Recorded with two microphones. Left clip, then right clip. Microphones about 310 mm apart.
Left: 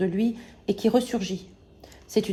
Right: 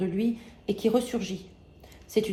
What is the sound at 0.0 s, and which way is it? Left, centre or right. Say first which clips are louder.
A woman's voice: left 3 dB; left.